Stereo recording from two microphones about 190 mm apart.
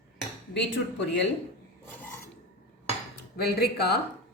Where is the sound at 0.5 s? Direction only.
70° left (ahead or behind).